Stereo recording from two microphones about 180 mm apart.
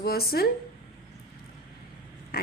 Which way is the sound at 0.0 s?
60° left (ahead or behind).